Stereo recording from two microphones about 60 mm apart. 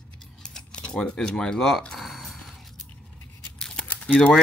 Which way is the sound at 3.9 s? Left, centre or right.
Left.